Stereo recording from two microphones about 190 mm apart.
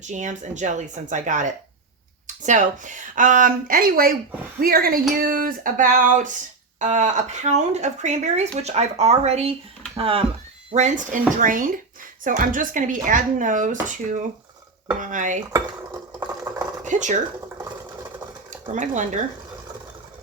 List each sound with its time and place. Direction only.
0.0 s speech: 40° right (ahead or behind)
16.2 s a sound: 20° right (ahead or behind)
16.8 s speech: 40° right (ahead or behind)
18.5 s speech: 40° right (ahead or behind)